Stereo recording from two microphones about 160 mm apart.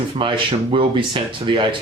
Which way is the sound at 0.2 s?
30° right (ahead or behind).